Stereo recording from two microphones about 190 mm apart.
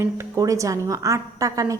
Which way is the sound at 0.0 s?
15° right (ahead or behind).